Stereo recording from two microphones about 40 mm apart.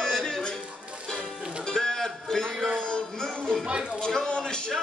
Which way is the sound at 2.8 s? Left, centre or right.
Left.